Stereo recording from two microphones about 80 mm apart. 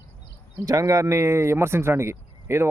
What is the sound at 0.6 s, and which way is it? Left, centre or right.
Speech, right.